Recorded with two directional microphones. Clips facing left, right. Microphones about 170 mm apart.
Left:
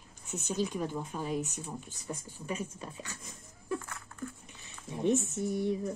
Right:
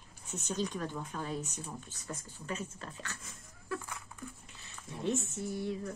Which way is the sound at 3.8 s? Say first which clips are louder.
Left 3 dB; 15° right (ahead or behind).